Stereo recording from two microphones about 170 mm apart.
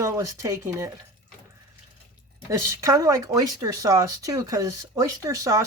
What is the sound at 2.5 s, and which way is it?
Speech, 20° right (ahead or behind).